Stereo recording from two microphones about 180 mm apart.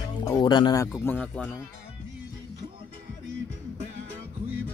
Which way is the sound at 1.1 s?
10° left (ahead or behind).